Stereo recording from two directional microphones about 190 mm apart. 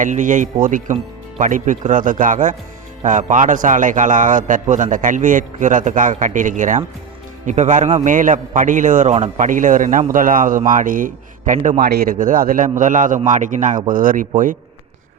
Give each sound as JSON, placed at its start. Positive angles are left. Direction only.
{"t": 0.0, "sound": "a man's voice", "side_deg": -40}
{"t": 11.8, "sound": "speech", "side_deg": -55}
{"t": 12.1, "sound": "a man's voice", "side_deg": -45}